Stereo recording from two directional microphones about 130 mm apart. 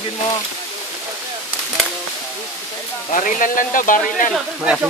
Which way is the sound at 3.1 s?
85° left.